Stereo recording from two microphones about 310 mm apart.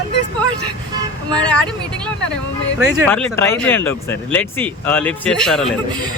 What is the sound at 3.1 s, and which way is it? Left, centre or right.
Speech, centre.